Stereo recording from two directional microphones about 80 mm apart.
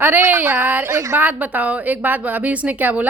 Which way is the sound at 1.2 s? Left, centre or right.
Right.